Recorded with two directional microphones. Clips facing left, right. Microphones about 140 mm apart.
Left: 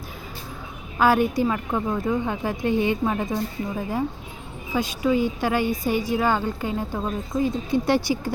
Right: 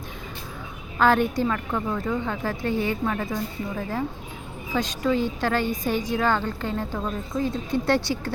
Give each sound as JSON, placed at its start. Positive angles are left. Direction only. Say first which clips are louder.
{"t": 0.9, "sound": "a woman's voice", "louder": "left 1 dB", "side_deg": 10}